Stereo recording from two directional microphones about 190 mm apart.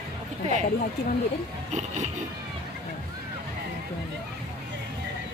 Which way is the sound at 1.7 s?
40° right (ahead or behind).